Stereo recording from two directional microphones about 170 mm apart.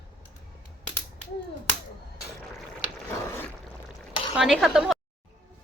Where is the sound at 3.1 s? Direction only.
10° left (ahead or behind).